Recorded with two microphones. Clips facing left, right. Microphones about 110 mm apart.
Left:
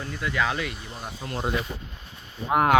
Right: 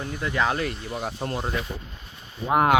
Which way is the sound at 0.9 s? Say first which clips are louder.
Right 7 dB; 55° right (ahead or behind).